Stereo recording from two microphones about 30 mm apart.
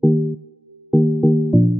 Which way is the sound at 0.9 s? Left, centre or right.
Centre.